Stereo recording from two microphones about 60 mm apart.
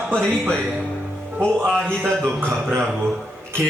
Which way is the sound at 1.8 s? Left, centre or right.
Right.